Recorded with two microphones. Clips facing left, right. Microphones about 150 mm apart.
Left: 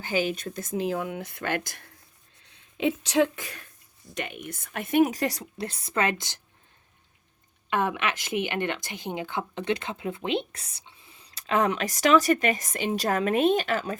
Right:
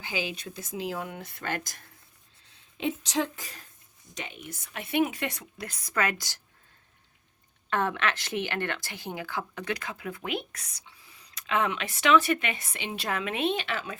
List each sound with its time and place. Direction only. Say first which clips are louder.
0.0 s a woman's voice: left 7 dB; 50° left (ahead or behind); by 6.4 s 25° left (ahead or behind)
7.7 s speech: left 1 dB; 15° left (ahead or behind); by 14.0 s 40° left (ahead or behind)